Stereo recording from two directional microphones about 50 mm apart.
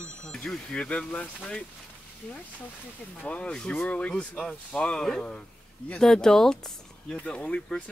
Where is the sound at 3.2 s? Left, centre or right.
Left.